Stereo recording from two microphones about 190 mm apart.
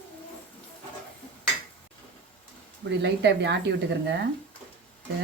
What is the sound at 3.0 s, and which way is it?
Speech, 65° right (ahead or behind).